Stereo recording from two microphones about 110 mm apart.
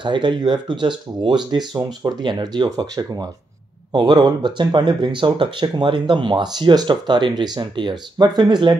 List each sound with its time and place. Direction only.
0.0 s speech: 45° right (ahead or behind)